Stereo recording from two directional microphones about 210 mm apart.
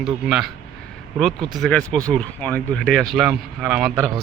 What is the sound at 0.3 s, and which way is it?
Speech, centre (ahead or behind).